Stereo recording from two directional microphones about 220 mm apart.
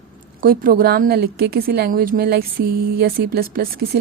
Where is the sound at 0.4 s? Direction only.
40° right (ahead or behind).